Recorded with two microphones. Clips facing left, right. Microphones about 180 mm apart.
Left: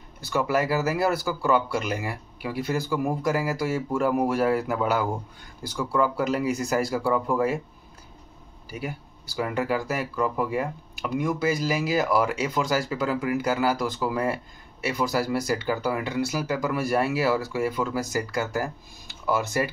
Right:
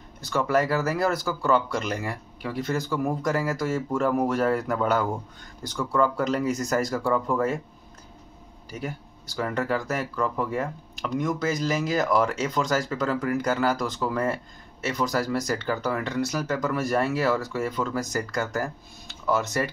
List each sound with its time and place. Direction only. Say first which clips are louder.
0.3 s speech: right 1 dB; 10° left (ahead or behind)
8.6 s speech: even; 5° left (ahead or behind)